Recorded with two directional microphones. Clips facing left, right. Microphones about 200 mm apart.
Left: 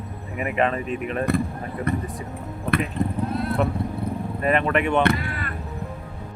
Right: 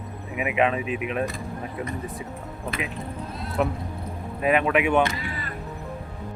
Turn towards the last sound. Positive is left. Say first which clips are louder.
# left 6 dB
turn(degrees=60)  # may be behind; listen again after turning